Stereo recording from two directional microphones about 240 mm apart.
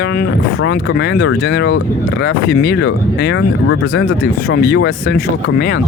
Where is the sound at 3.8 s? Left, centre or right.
Left.